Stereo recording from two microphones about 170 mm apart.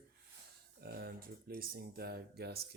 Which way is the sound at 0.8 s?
65° right (ahead or behind).